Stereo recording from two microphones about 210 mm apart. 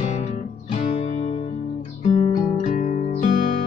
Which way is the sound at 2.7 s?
35° left (ahead or behind).